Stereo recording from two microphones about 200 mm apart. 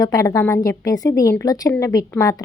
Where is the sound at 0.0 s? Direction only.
15° left (ahead or behind).